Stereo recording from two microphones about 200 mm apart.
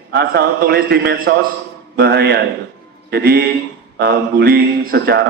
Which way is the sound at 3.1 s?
50° right (ahead or behind).